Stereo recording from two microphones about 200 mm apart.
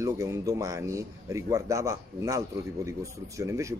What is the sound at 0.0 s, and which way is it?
Speech, 15° right (ahead or behind).